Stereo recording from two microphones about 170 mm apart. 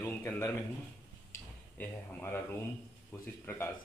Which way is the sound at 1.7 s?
10° left (ahead or behind).